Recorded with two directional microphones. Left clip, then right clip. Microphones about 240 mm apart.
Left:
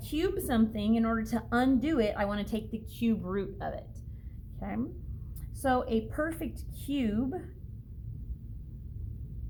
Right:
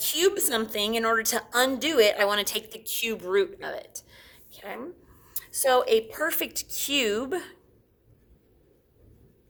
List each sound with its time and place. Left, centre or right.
0.0 s a woman's voice: right